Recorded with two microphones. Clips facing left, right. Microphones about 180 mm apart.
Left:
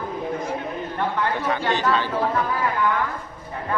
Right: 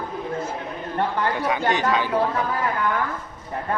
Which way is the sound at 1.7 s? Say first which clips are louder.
Even; 15° right (ahead or behind).